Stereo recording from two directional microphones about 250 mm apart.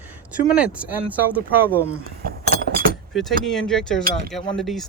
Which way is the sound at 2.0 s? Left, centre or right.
Right.